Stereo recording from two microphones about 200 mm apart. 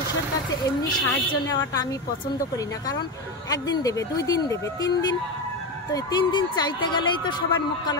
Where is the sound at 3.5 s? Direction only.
20° left (ahead or behind).